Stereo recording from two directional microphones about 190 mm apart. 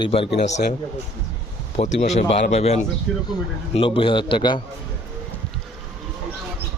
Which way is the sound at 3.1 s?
Centre (ahead or behind).